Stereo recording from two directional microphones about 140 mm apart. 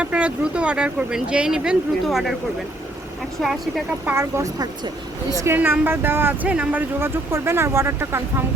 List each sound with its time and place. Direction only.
0.0 s speech: 10° right (ahead or behind)
4.0 s speech: 20° right (ahead or behind)
5.5 s speech: 15° right (ahead or behind)